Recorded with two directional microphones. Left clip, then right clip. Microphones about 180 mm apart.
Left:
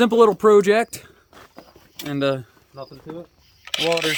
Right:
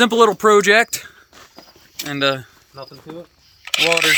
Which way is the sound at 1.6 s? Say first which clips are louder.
Right 6 dB; 10° left (ahead or behind).